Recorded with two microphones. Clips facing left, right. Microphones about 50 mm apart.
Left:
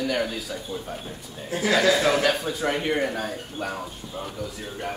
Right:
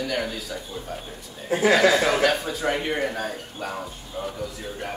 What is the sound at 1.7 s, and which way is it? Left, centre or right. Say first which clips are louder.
Speech: right 1 dB; centre.